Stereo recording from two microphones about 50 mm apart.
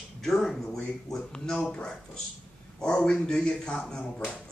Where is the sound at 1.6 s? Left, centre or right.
Left.